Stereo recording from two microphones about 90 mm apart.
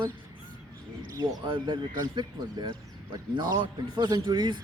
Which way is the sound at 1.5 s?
65° right (ahead or behind).